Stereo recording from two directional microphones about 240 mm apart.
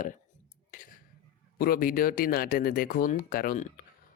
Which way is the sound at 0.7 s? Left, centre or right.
Left.